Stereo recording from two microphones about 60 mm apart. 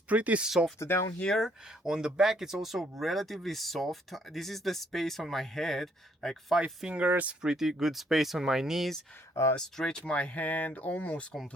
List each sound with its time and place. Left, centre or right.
0.1 s speech: right
0.4 s speech: centre
0.8 s speech: left
1.4 s speech: centre
6.8 s speech: centre
7.4 s speech: centre
9.3 s speech: left
9.6 s speech: centre